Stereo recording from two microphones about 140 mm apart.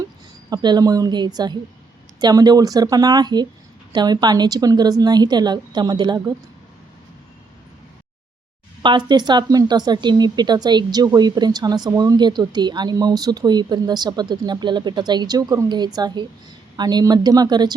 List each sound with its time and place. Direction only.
0.5 s speech: 30° right (ahead or behind)
8.8 s speech: 30° right (ahead or behind)